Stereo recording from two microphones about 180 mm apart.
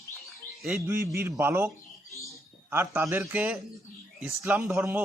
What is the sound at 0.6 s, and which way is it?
Speech, 15° right (ahead or behind).